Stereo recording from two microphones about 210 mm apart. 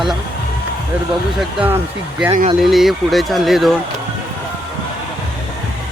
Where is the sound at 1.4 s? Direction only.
5° right (ahead or behind).